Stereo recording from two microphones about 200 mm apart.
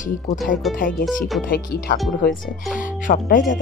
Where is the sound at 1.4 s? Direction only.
50° left (ahead or behind).